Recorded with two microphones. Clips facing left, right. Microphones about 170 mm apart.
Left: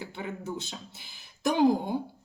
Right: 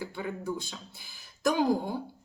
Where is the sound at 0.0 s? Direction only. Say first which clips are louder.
Right 2 dB; 20° left (ahead or behind).